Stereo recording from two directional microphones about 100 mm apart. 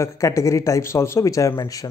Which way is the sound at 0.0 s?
30° left (ahead or behind).